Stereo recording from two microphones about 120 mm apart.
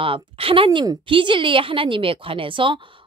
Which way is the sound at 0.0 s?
50° right (ahead or behind).